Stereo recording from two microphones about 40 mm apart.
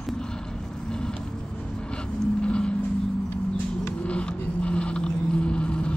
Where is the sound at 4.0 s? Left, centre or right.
Left.